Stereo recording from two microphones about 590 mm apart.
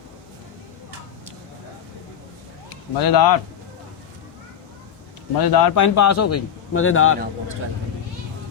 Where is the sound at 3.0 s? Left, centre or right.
Left.